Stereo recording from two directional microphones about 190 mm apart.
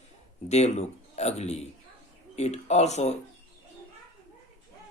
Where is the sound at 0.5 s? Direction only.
35° left (ahead or behind).